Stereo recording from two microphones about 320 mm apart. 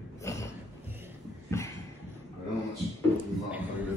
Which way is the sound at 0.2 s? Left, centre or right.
Centre.